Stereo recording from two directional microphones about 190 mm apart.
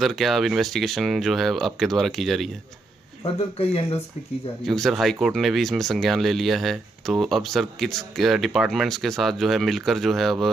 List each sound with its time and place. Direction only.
0.0 s speech: centre (ahead or behind)
3.3 s speech: 35° left (ahead or behind)
4.6 s speech: centre (ahead or behind)